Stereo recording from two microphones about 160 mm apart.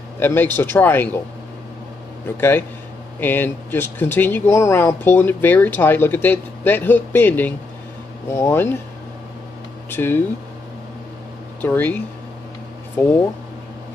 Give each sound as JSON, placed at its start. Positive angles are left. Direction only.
{"t": 0.2, "sound": "speech", "side_deg": 15}
{"t": 2.2, "sound": "speech", "side_deg": 15}
{"t": 9.8, "sound": "speech", "side_deg": 15}
{"t": 11.6, "sound": "speech", "side_deg": 10}